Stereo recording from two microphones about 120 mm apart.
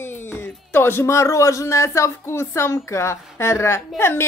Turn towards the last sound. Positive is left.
turn(degrees=20)  # may be behind; listen again after turning